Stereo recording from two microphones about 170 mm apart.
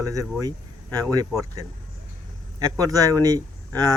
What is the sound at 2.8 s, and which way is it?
Speech, 20° right (ahead or behind).